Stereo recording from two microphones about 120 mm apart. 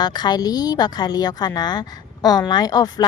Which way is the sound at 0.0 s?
35° left (ahead or behind).